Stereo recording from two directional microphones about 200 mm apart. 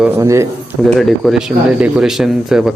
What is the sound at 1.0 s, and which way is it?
Speech, centre (ahead or behind).